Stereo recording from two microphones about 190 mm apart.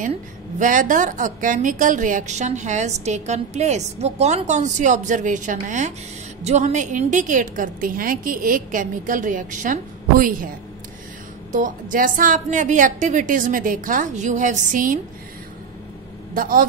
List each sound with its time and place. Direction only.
0.6 s a woman's voice: 45° right (ahead or behind)
11.5 s a woman's voice: 45° right (ahead or behind)
16.3 s a woman's voice: 45° right (ahead or behind)